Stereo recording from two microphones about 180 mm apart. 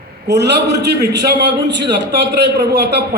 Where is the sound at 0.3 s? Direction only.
70° right (ahead or behind).